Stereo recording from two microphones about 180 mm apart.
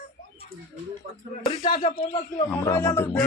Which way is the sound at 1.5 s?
35° left (ahead or behind).